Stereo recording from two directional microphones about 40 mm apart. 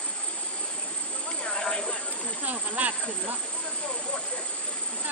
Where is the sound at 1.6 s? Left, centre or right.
Centre.